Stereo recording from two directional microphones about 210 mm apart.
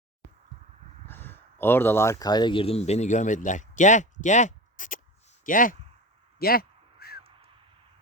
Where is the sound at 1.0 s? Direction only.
10° left (ahead or behind); by 5.7 s 40° left (ahead or behind).